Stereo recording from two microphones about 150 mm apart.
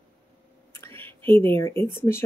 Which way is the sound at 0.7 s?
15° left (ahead or behind).